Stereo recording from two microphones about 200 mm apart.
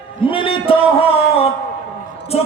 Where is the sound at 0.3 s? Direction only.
25° left (ahead or behind).